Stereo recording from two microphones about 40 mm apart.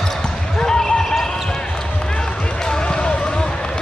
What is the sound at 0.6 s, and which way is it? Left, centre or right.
Basketball bounce, centre.